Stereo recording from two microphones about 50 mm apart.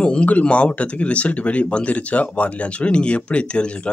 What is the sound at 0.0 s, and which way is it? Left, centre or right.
Speech, left.